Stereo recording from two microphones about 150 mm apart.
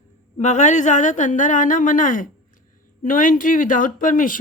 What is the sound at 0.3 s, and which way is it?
A woman's voice, 50° left (ahead or behind).